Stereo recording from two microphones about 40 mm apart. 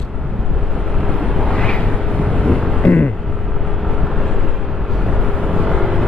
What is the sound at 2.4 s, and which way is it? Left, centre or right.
Vehicle, centre.